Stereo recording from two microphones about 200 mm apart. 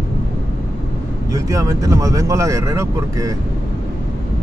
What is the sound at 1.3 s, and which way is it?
Speech, 15° right (ahead or behind).